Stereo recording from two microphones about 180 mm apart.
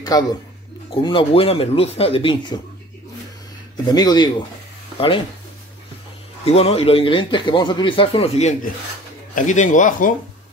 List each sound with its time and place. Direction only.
0.1 s speech: 20° left (ahead or behind)
3.7 s speech: 20° left (ahead or behind)
6.4 s speech: 35° left (ahead or behind)